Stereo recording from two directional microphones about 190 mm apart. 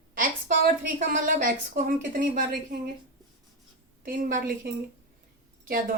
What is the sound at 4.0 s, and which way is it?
Speech, 45° right (ahead or behind).